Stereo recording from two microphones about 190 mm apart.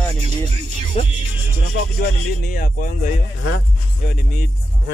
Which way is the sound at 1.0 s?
35° left (ahead or behind).